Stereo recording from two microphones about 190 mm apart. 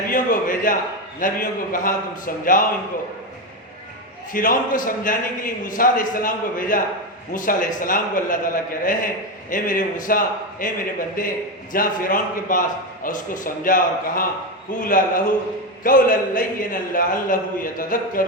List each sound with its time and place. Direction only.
0.1 s a sound: 45° left (ahead or behind)
1.2 s a man's voice: 45° left (ahead or behind)
4.3 s a man's voice: 45° left (ahead or behind)